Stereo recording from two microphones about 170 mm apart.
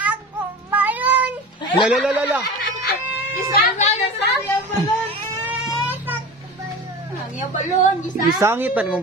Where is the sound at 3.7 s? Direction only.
40° left (ahead or behind).